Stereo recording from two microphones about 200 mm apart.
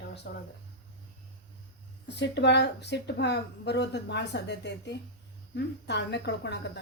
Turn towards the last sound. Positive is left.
turn(degrees=60)  # may be behind; listen again after turning